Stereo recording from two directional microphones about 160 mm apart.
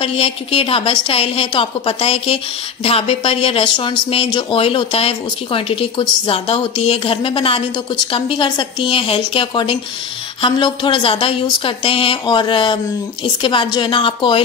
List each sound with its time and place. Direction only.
0.0 s a woman's voice: 35° left (ahead or behind)